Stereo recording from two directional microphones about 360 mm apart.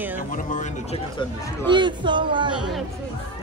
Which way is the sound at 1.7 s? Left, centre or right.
Centre.